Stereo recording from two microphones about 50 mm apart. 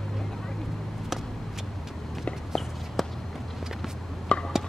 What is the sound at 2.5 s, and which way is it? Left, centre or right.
Walk, centre.